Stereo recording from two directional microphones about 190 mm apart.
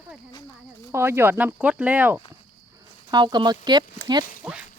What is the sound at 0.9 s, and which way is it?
Speech, 15° right (ahead or behind).